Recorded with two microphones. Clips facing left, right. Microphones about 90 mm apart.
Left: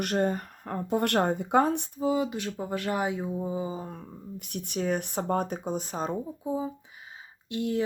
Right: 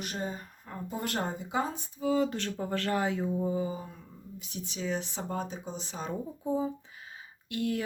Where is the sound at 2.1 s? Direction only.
10° left (ahead or behind).